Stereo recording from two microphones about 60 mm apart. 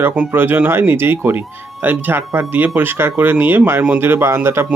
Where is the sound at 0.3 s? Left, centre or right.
Right.